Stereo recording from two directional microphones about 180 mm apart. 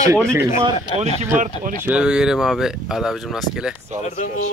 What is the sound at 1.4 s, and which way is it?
Speech, 50° right (ahead or behind).